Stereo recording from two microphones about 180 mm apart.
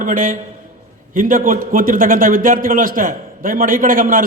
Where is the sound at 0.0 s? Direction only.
50° right (ahead or behind).